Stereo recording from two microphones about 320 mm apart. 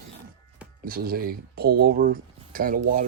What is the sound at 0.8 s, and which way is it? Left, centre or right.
Speech, right.